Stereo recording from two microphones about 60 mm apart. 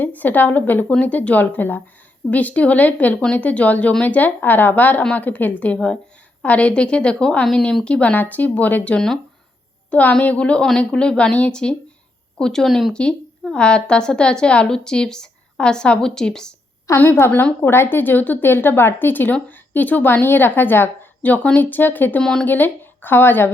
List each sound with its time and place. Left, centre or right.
0.0 s a woman's voice: left
8.1 s a woman's voice: left
12.4 s a woman's voice: centre
12.9 s a woman's voice: centre
17.0 s speech: left
22.2 s a woman's voice: centre
22.4 s speech: left